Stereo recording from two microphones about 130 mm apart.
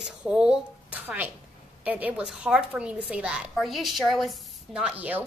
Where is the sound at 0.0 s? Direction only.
5° right (ahead or behind).